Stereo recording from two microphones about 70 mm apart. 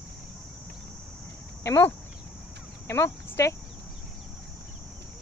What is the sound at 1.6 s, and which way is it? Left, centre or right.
Speech, left.